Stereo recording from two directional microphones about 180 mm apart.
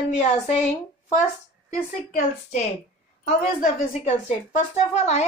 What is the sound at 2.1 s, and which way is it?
Speech, 45° left (ahead or behind).